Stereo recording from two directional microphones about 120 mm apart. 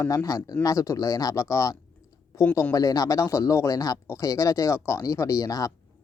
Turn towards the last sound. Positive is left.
turn(degrees=30)  # may be behind; listen again after turning